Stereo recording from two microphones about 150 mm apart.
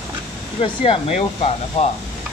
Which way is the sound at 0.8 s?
40° left (ahead or behind).